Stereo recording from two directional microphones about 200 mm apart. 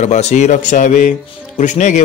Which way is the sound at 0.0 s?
35° left (ahead or behind).